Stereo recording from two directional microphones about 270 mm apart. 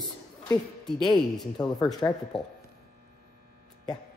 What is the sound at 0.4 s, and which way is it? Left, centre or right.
Speech, centre.